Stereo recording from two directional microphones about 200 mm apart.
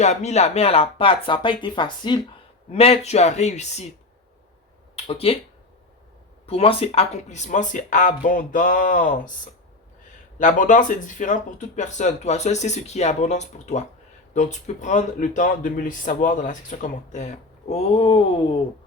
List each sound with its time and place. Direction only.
0.0 s speech: 35° left (ahead or behind)
5.0 s speech: 30° left (ahead or behind)
6.4 s speech: 30° left (ahead or behind)
10.3 s speech: 40° left (ahead or behind)